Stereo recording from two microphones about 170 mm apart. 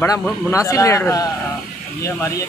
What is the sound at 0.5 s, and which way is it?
Speech, 20° left (ahead or behind).